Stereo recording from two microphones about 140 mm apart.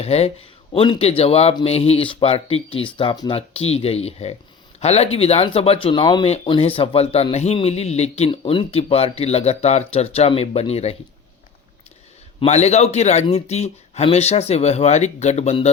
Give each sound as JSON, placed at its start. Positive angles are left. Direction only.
{"t": 0.0, "sound": "speech", "side_deg": 50}
{"t": 12.5, "sound": "speech", "side_deg": 55}